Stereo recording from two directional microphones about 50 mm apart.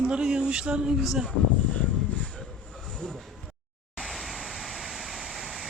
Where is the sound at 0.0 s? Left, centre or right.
Centre.